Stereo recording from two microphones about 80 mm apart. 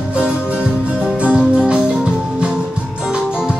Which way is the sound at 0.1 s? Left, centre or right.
Centre.